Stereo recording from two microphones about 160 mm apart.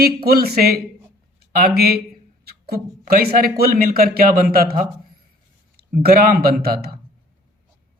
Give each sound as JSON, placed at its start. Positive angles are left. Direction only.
{"t": 0.0, "sound": "speech", "side_deg": -70}